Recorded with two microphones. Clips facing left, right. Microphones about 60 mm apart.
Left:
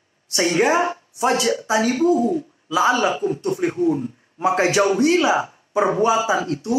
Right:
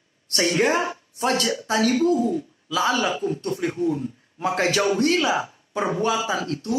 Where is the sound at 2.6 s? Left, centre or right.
Left.